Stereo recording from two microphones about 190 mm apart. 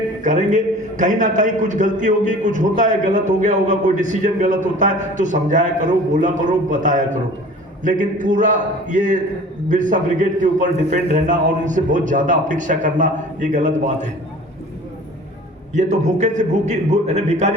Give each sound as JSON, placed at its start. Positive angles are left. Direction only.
{"t": 0.2, "sound": "a man's voice", "side_deg": -40}
{"t": 15.7, "sound": "a man's voice", "side_deg": -40}